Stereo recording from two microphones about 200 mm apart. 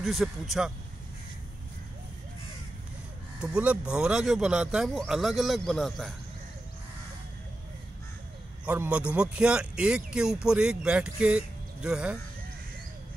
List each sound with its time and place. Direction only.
0.0 s speech: centre (ahead or behind)
3.3 s speech: 5° right (ahead or behind)
8.6 s speech: 5° right (ahead or behind)